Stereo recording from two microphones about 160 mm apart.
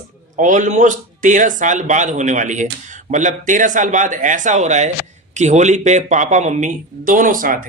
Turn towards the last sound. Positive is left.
turn(degrees=-60)  # may be behind; listen again after turning